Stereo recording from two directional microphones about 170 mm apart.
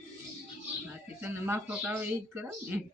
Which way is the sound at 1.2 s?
10° right (ahead or behind).